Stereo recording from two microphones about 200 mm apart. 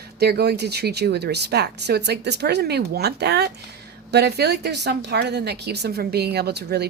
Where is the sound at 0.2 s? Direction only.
55° right (ahead or behind).